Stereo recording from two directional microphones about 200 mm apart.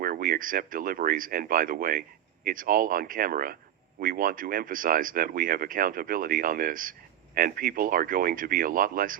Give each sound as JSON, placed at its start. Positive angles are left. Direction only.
{"t": 0.0, "sound": "speech", "side_deg": -45}